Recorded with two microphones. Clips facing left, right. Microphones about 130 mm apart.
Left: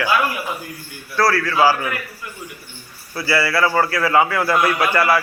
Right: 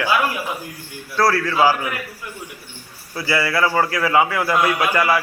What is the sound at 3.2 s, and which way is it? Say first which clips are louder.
A man's voice: left 1 dB; 20° right (ahead or behind).